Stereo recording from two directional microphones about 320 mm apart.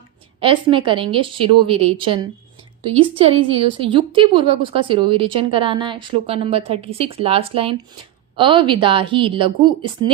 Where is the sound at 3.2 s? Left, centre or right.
Centre.